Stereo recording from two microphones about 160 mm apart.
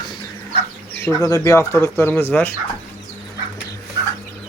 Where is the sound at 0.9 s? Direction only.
15° left (ahead or behind).